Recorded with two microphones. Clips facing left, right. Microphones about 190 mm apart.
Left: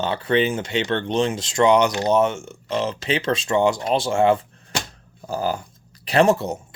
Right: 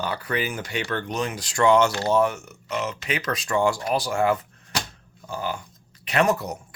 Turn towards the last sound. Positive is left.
turn(degrees=25)  # may be behind; listen again after turning